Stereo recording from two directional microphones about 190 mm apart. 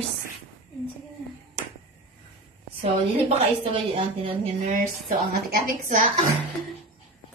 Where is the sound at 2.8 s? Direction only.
30° right (ahead or behind).